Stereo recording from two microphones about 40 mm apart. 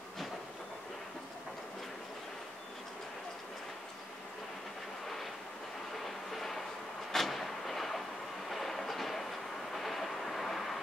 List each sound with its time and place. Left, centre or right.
6.0 s a sound: centre
7.1 s vehicle: centre
8.5 s train: centre
9.8 s vehicle: centre